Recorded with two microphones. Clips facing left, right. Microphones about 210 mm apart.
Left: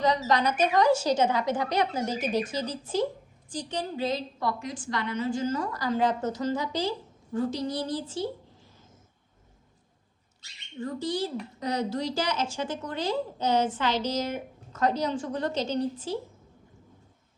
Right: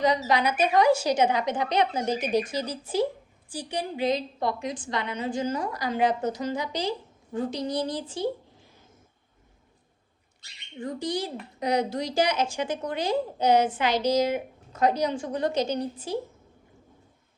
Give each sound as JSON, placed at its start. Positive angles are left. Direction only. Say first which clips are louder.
{"t": 0.0, "sound": "a woman's voice", "louder": "right 1 dB", "side_deg": -15}
{"t": 10.8, "sound": "a woman's voice", "louder": "even", "side_deg": -15}